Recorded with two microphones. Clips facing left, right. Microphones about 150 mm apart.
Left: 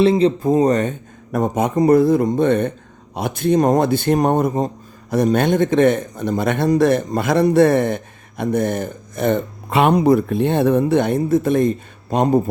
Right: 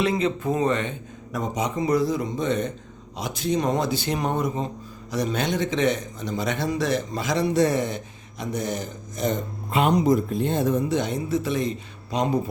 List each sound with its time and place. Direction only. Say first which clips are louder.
0.0 s a man's voice: left 9 dB; 30° left (ahead or behind); by 12.4 s 50° left (ahead or behind)